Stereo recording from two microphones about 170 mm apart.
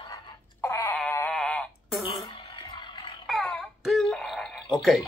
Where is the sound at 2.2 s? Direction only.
30° left (ahead or behind).